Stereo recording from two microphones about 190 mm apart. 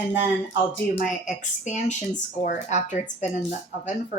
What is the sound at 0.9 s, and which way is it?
Speech, 40° left (ahead or behind).